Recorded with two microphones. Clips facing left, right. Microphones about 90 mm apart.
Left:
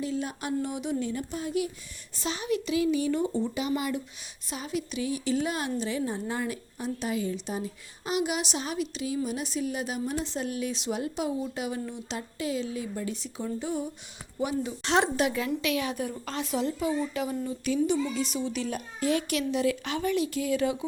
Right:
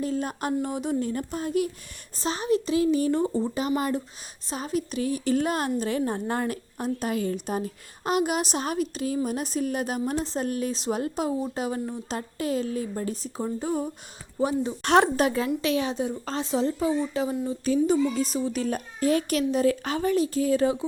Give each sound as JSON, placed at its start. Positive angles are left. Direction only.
{"t": 0.0, "sound": "a woman's voice", "side_deg": -45}
{"t": 14.8, "sound": "a woman's voice", "side_deg": -50}